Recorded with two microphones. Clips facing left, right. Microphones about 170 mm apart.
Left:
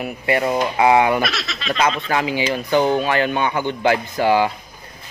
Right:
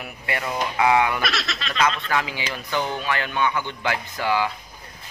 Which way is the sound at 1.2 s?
Centre (ahead or behind).